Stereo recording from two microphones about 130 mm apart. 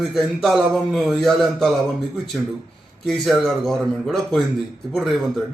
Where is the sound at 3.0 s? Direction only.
5° left (ahead or behind).